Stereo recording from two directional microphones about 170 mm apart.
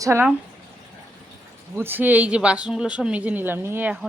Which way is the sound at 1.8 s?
10° right (ahead or behind).